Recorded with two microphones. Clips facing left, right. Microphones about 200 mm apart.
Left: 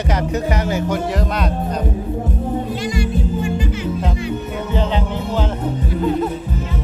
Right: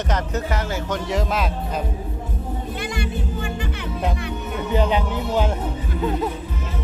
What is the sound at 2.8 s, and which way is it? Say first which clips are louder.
Music: left 6 dB; 60° right (ahead or behind).